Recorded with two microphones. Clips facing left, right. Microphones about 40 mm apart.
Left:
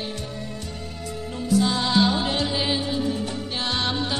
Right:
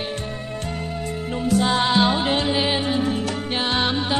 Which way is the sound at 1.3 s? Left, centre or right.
Right.